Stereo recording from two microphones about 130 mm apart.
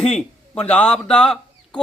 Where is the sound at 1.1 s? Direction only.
5° left (ahead or behind).